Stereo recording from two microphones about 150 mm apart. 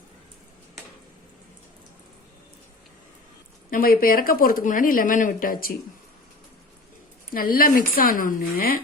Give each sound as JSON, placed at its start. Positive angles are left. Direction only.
{"t": 3.7, "sound": "speech", "side_deg": 70}
{"t": 7.3, "sound": "speech", "side_deg": 70}